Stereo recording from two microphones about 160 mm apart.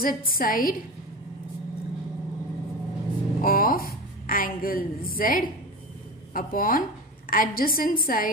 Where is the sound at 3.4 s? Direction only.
65° left (ahead or behind).